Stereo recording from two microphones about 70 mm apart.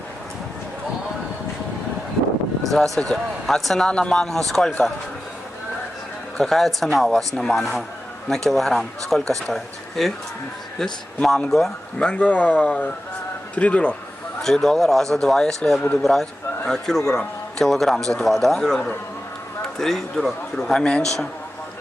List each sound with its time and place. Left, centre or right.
2.6 s a man's voice: centre
6.3 s a man's voice: centre
11.2 s speech: centre
14.4 s a man's voice: centre